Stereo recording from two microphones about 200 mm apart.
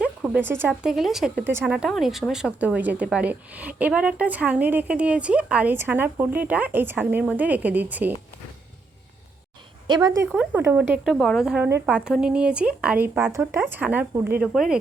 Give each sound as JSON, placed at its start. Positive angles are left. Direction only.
{"t": 0.0, "sound": "speech", "side_deg": -10}
{"t": 9.8, "sound": "speech", "side_deg": -20}
{"t": 10.2, "sound": "speech", "side_deg": -5}